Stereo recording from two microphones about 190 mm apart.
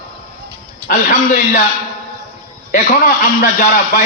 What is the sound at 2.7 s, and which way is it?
A man's voice, 45° left (ahead or behind).